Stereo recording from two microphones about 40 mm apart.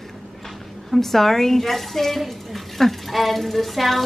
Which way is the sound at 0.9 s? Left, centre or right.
Centre.